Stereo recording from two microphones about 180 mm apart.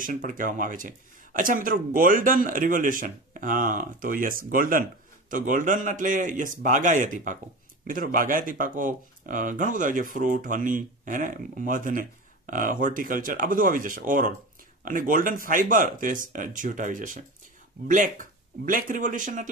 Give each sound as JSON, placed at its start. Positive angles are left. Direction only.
{"t": 0.0, "sound": "speech", "side_deg": -50}